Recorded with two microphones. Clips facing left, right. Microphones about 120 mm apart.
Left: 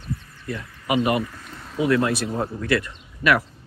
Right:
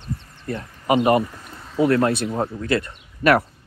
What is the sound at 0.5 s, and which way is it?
Speech, 35° right (ahead or behind).